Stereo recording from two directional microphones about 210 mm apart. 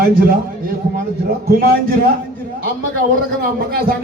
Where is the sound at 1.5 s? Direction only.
45° right (ahead or behind).